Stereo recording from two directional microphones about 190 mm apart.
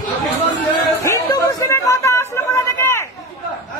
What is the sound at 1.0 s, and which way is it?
Chatter, 15° left (ahead or behind).